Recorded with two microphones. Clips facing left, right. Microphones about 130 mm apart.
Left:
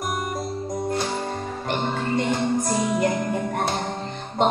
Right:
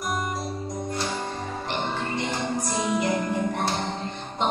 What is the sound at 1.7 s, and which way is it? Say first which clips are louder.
Music: left 5 dB; 50° left (ahead or behind).